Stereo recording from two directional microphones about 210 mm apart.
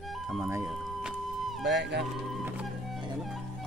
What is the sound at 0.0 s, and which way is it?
Music, centre (ahead or behind).